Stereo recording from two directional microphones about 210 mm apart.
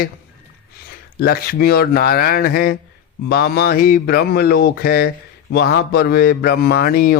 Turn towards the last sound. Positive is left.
turn(degrees=45)  # may be behind; listen again after turning